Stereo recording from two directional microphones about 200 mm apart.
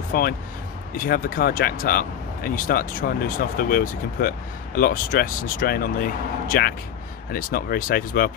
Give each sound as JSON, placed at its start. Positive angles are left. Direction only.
{"t": 0.1, "sound": "speech", "side_deg": 45}